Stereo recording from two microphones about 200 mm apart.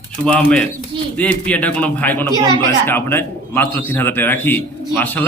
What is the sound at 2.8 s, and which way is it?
A man's voice, 10° left (ahead or behind).